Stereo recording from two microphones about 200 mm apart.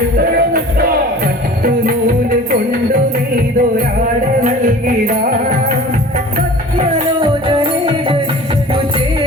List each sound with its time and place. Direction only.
0.2 s music: 50° right (ahead or behind)
2.5 s music: 45° right (ahead or behind)
7.6 s music: 25° right (ahead or behind)